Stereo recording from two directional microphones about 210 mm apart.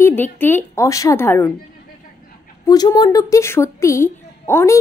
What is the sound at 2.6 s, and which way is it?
A woman's voice, 15° left (ahead or behind).